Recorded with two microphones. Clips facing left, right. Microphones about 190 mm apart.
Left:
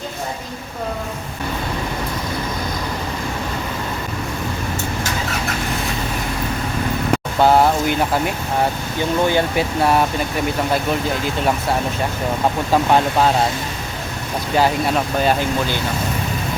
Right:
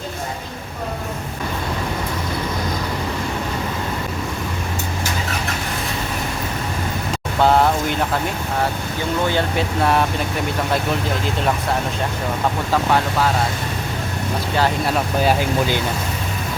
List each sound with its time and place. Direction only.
7.4 s vehicle: 5° left (ahead or behind)
9.3 s speech: 5° left (ahead or behind)
12.7 s speech: 20° left (ahead or behind)
14.8 s speech: 5° right (ahead or behind)